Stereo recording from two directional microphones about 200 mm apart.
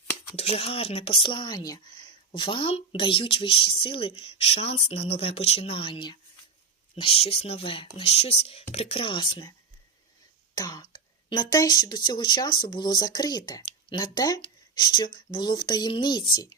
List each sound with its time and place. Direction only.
0.3 s speech: 30° left (ahead or behind)
10.5 s speech: 15° left (ahead or behind)